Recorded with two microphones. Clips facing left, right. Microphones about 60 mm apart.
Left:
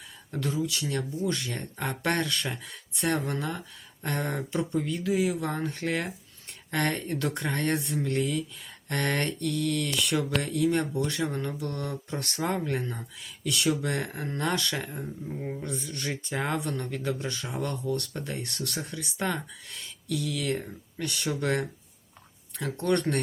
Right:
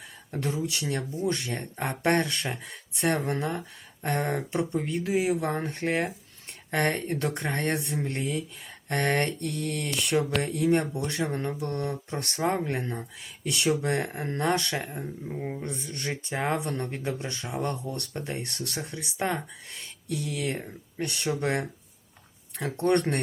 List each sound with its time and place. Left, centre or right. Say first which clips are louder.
0.3 s speech: even; right
20.1 s speech: left 1 dB; right
22.6 s speech: right 2 dB; right